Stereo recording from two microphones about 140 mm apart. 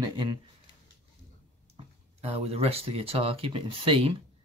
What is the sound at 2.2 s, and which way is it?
Speech, 45° right (ahead or behind).